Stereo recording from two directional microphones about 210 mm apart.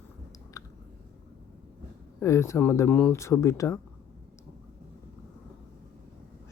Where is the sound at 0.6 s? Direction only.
15° left (ahead or behind).